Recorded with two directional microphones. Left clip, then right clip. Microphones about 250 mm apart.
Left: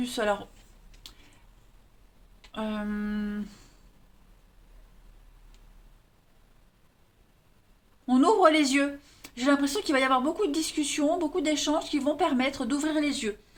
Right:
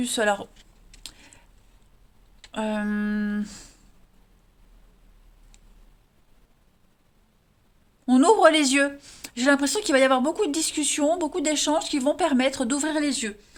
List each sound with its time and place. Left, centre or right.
0.0 s speech: right
2.5 s speech: right
8.0 s speech: right